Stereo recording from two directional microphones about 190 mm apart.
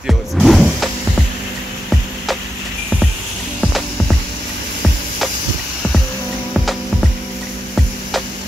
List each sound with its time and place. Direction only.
0.0 s power windows: centre (ahead or behind)